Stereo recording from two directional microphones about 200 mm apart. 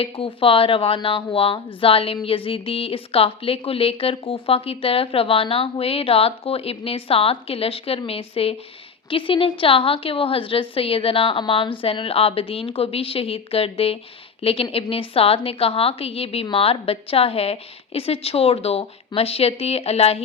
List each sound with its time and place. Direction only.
0.0 s speech: 25° left (ahead or behind)